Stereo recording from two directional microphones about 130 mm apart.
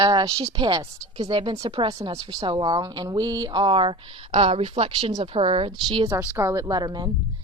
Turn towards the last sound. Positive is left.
turn(degrees=-30)  # may be behind; listen again after turning